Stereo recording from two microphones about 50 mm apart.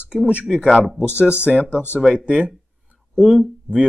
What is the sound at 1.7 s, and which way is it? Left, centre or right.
Speech, left.